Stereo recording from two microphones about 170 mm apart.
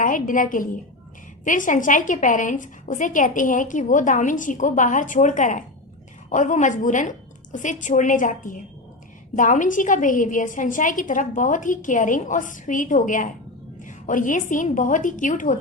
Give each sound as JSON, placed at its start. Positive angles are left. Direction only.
{"t": 0.0, "sound": "a woman's voice", "side_deg": 50}